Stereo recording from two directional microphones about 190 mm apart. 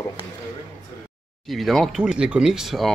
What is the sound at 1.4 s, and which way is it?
Speech, centre (ahead or behind).